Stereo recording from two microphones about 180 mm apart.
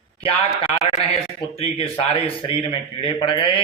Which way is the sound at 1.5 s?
30° left (ahead or behind).